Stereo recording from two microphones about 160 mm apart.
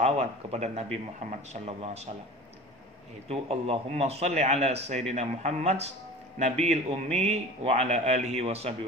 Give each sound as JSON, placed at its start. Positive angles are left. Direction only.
{"t": 0.0, "sound": "a man's voice", "side_deg": -40}
{"t": 3.3, "sound": "a man's voice", "side_deg": -40}